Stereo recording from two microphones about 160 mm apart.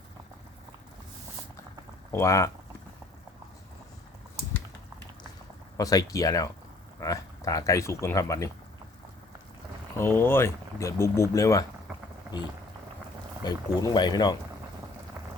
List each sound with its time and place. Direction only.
2.1 s speech: 20° left (ahead or behind)
5.7 s speech: 20° left (ahead or behind)
10.0 s speech: 15° left (ahead or behind)
13.4 s speech: 25° left (ahead or behind)